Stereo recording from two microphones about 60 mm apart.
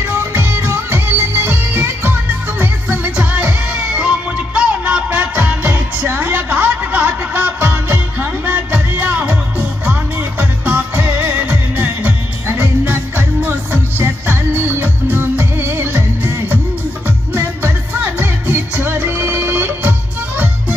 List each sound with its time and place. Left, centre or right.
0.1 s music: right
2.6 s music: right